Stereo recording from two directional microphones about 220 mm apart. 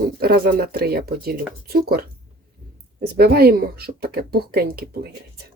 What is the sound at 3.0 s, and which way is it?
Speech, 45° right (ahead or behind).